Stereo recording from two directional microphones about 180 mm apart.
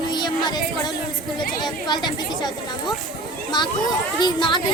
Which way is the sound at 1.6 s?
25° left (ahead or behind).